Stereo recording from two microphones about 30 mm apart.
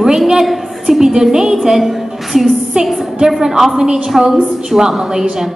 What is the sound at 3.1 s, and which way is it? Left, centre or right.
A woman's voice, centre.